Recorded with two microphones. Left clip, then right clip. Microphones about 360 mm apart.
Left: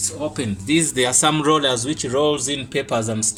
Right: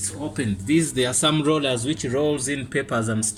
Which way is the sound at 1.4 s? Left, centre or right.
Left.